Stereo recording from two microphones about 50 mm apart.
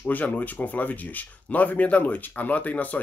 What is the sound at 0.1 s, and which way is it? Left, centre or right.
Speech, left.